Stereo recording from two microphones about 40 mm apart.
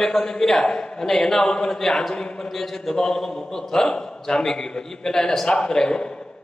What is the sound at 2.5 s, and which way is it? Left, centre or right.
A man's voice, centre.